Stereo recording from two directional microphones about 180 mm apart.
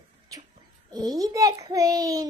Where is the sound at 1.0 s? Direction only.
20° right (ahead or behind).